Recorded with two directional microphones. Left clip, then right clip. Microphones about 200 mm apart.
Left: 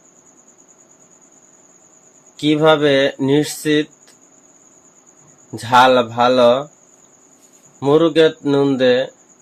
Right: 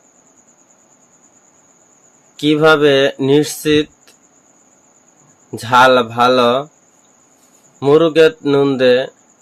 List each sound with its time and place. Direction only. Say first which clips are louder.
2.3 s speech: right 2 dB; 25° right (ahead or behind)
5.5 s speech: right 2 dB; 25° right (ahead or behind)
7.8 s speech: right 3 dB; 20° right (ahead or behind)